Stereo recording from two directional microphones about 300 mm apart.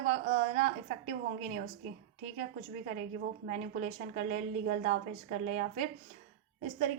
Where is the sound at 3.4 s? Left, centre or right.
Right.